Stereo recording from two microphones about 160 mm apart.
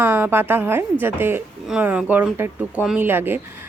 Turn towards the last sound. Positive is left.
turn(degrees=-15)  # may be behind; listen again after turning